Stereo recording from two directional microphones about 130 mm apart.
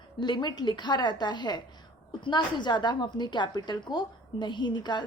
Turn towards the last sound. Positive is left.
turn(degrees=35)  # may be behind; listen again after turning